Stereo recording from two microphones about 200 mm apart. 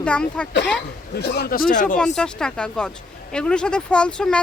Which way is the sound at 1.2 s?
55° left (ahead or behind).